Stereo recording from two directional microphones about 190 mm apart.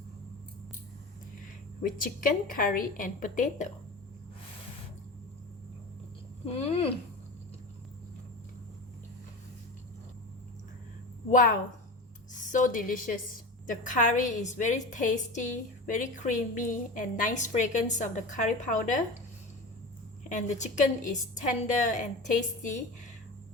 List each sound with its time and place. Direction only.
1.8 s a woman's voice: 45° left (ahead or behind)
6.4 s a woman's voice: 30° left (ahead or behind)
11.3 s a woman's voice: 45° left (ahead or behind)
20.3 s a woman's voice: 40° left (ahead or behind)